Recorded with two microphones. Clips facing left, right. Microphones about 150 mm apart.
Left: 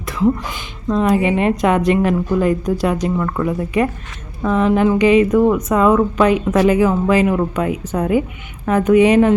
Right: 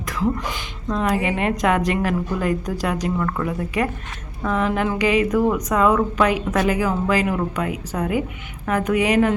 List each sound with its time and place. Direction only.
0.2 s a woman's voice: 20° left (ahead or behind)